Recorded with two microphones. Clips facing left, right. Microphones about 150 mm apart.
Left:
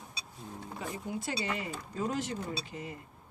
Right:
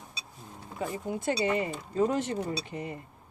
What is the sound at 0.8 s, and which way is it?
Speech, 50° right (ahead or behind).